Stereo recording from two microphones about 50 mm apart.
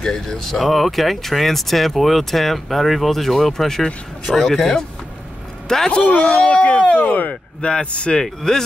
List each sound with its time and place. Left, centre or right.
0.0 s a man's voice: centre
6.0 s speech: left
8.4 s a man's voice: centre